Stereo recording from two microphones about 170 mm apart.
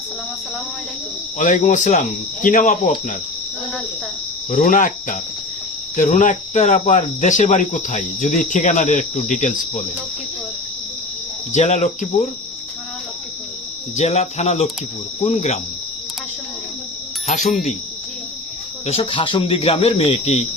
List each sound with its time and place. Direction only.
1.4 s speech: 50° left (ahead or behind)
4.5 s speech: 50° left (ahead or behind)
11.5 s speech: 45° left (ahead or behind)
13.9 s speech: 40° left (ahead or behind)
17.2 s speech: 45° left (ahead or behind)
18.9 s speech: 35° left (ahead or behind)